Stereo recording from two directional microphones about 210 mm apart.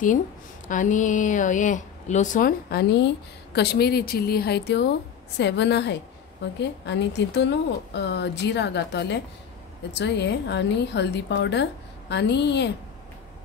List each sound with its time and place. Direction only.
0.7 s a woman's voice: 35° left (ahead or behind); by 12.7 s 55° left (ahead or behind)